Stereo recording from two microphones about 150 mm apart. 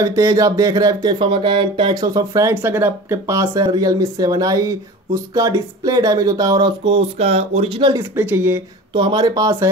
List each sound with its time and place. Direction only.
0.0 s speech: 20° right (ahead or behind); by 7.7 s 45° right (ahead or behind)
8.2 s speech: 15° right (ahead or behind)
8.9 s speech: 30° right (ahead or behind)